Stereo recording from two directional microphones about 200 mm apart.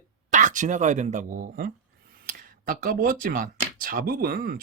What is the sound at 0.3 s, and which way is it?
Speech, 40° right (ahead or behind).